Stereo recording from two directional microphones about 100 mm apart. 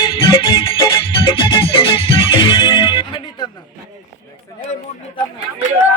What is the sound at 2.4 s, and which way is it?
Music, 50° left (ahead or behind).